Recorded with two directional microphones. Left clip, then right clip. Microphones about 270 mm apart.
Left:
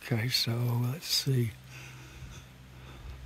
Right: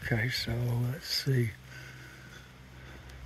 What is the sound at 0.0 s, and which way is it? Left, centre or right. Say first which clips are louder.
Speech: left 1 dB; left.